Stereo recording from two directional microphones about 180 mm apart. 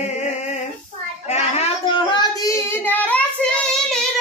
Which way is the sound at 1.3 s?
35° left (ahead or behind).